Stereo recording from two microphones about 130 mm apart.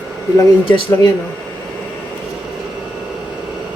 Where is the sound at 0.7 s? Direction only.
40° left (ahead or behind).